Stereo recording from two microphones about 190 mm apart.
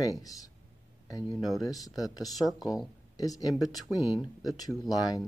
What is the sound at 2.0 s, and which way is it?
Speech, 20° left (ahead or behind).